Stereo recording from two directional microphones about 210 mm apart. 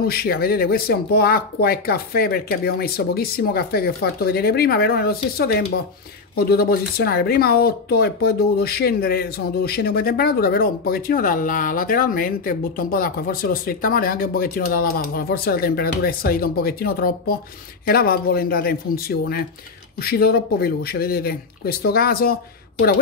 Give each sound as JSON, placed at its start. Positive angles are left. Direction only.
{"t": 0.0, "sound": "speech", "side_deg": 45}